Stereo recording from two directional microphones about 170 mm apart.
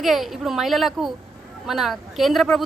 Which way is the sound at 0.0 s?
Centre (ahead or behind).